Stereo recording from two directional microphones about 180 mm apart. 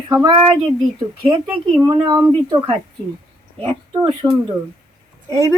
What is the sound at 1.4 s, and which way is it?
A woman's voice, 15° right (ahead or behind).